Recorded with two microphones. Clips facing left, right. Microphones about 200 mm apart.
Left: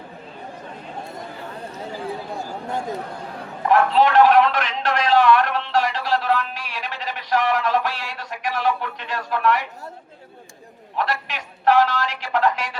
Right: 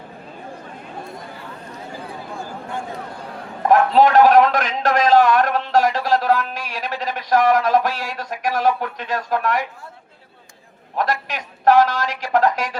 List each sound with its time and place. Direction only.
3.7 s a man's voice: 40° right (ahead or behind)
10.9 s a man's voice: 40° right (ahead or behind)